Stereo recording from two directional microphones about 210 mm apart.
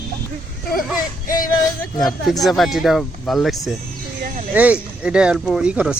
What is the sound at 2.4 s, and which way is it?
Speech, centre (ahead or behind).